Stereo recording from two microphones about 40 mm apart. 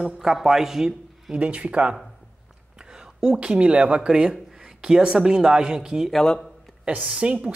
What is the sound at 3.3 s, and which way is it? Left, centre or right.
Speech, right.